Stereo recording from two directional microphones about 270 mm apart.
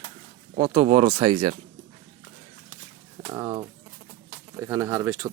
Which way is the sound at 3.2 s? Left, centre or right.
Centre.